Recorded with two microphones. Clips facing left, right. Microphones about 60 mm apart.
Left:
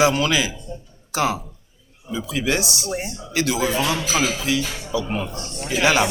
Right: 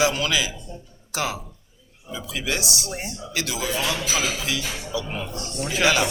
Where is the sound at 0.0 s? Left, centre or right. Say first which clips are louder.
Left 4 dB; left.